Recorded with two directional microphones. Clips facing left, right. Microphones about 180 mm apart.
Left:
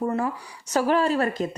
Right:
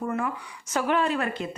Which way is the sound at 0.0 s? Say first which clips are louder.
Left 3 dB; 35° left (ahead or behind).